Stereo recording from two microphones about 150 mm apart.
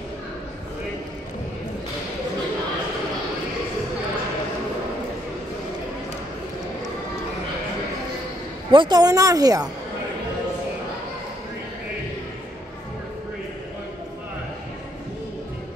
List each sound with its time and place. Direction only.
8.7 s a woman's voice: 30° right (ahead or behind)